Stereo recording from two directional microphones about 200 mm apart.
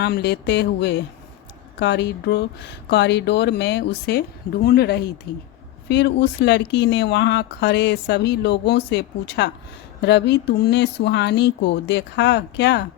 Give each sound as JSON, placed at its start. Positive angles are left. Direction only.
{"t": 0.0, "sound": "speech", "side_deg": 55}